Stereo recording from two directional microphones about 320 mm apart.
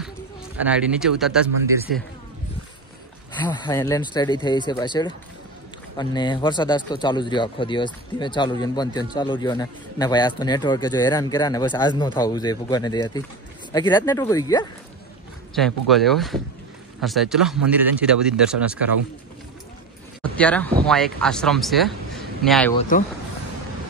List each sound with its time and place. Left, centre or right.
0.6 s a man's voice: centre
3.3 s a man's voice: centre
15.5 s speech: centre
20.3 s speech: centre